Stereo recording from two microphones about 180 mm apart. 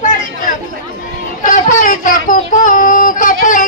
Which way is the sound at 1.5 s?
45° left (ahead or behind).